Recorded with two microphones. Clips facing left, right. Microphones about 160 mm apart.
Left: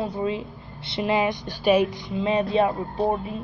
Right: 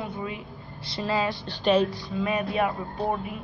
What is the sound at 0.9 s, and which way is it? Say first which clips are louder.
Speech: left 4 dB; 20° left (ahead or behind).